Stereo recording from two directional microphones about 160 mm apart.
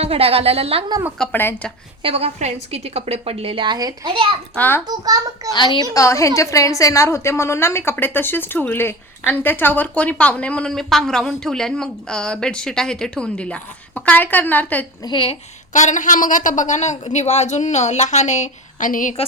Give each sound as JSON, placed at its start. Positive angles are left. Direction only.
{"t": 0.0, "sound": "a woman's voice", "side_deg": -35}
{"t": 1.2, "sound": "a woman's voice", "side_deg": 10}
{"t": 2.0, "sound": "a woman's voice", "side_deg": -35}
{"t": 4.5, "sound": "a woman's voice", "side_deg": 10}
{"t": 4.9, "sound": "a child's voice", "side_deg": -20}
{"t": 5.5, "sound": "a woman's voice", "side_deg": 30}
{"t": 15.0, "sound": "a woman's voice", "side_deg": 30}
{"t": 15.7, "sound": "a woman's voice", "side_deg": 50}